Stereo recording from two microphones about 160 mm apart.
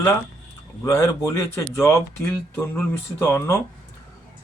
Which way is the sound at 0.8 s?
20° left (ahead or behind).